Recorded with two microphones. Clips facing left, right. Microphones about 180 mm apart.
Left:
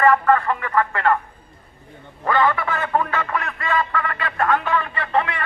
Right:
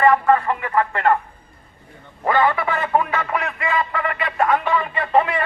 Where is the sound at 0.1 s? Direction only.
15° right (ahead or behind).